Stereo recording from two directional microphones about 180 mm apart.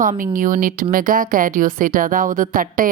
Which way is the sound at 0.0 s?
50° right (ahead or behind).